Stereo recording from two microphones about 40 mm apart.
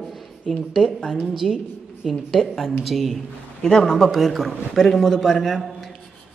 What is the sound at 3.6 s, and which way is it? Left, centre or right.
Speech, centre.